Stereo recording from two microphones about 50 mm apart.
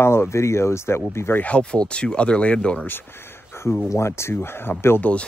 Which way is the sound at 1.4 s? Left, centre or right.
Left.